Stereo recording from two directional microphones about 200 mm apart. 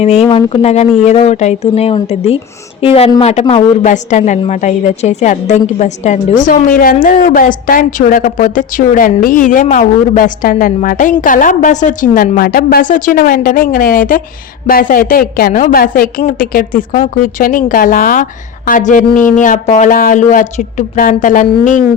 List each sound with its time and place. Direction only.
0.0 s a woman's voice: 30° left (ahead or behind)